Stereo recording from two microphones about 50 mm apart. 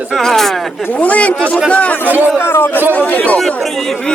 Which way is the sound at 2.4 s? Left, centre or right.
Left.